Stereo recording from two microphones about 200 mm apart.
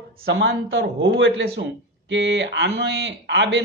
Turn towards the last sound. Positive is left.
turn(degrees=-60)  # may be behind; listen again after turning